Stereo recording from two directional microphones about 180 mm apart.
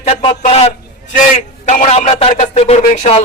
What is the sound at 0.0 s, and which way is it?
Speech, 35° left (ahead or behind).